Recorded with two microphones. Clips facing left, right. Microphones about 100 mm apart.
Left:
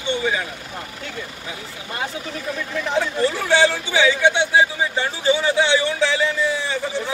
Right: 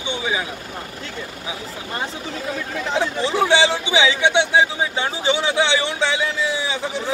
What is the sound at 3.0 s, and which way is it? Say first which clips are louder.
Speech: right 2 dB; 20° right (ahead or behind).